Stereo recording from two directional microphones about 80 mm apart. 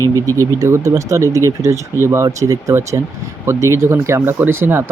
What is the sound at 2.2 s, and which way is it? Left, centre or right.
Speech, right.